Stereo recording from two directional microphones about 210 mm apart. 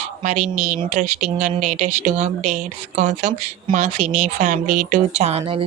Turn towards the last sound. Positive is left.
turn(degrees=-30)  # may be behind; listen again after turning